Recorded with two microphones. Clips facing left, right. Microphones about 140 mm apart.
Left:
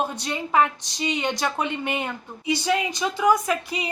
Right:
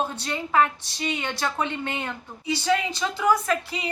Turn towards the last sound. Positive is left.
turn(degrees=15)  # may be behind; listen again after turning